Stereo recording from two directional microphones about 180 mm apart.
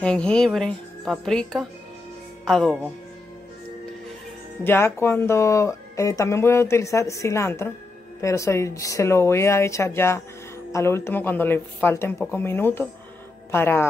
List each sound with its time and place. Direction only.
0.0 s speech: 5° left (ahead or behind)
4.6 s speech: 15° left (ahead or behind)